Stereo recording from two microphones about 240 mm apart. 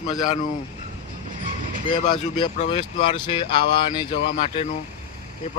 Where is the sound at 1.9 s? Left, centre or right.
Centre.